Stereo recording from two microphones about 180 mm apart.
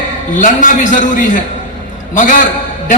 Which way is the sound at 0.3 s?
45° left (ahead or behind).